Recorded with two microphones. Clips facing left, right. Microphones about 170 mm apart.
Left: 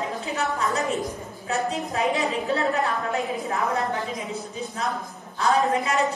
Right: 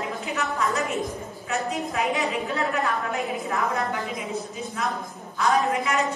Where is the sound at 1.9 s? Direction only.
35° left (ahead or behind).